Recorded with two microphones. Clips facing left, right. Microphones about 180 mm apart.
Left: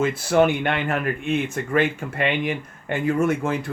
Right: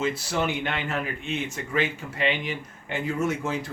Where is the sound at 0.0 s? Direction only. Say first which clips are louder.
Left 8 dB; 55° left (ahead or behind).